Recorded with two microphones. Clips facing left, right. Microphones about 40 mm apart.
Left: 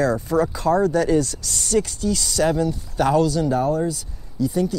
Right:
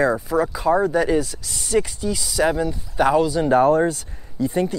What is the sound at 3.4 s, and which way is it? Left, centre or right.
Speech, right.